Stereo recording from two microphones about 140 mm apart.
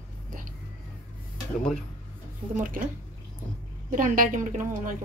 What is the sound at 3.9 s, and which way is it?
A woman's voice, 70° right (ahead or behind).